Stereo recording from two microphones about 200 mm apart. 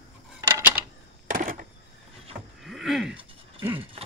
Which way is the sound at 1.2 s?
45° right (ahead or behind).